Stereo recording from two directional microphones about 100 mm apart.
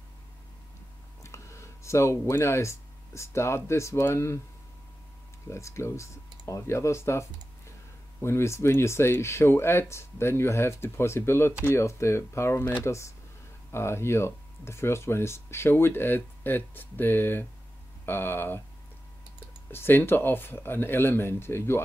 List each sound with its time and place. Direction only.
1.2 s speech: 30° left (ahead or behind)
5.5 s speech: 30° left (ahead or behind)
19.7 s speech: 20° left (ahead or behind)